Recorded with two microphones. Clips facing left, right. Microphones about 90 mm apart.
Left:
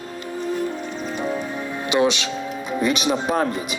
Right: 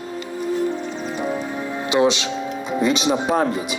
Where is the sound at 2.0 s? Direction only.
20° right (ahead or behind).